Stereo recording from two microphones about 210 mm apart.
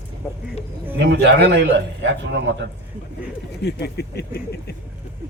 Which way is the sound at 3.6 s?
50° left (ahead or behind).